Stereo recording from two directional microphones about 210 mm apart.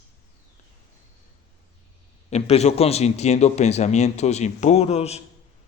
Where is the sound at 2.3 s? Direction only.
30° left (ahead or behind).